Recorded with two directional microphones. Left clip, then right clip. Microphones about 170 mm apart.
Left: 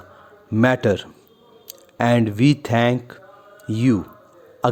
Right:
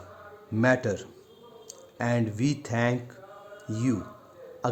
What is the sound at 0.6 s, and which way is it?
Speech, 45° left (ahead or behind).